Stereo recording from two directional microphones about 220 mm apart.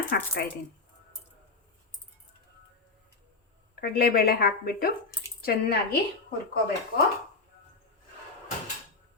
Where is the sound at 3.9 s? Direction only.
45° left (ahead or behind).